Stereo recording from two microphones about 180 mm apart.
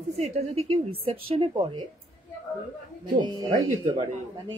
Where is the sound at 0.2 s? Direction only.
35° right (ahead or behind).